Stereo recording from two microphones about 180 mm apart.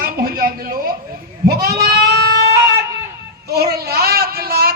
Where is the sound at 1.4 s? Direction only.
60° right (ahead or behind).